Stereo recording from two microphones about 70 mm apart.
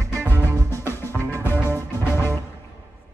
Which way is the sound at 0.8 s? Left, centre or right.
Left.